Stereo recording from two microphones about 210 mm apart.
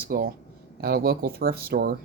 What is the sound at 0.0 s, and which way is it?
Speech, 45° right (ahead or behind).